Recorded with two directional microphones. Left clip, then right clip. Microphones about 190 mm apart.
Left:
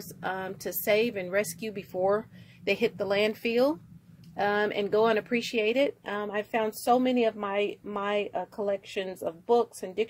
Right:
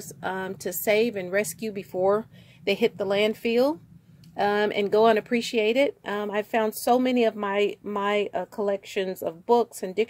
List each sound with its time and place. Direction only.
0.2 s speech: 30° right (ahead or behind)